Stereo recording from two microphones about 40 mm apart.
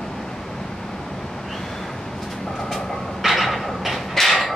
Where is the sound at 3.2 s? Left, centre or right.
Centre.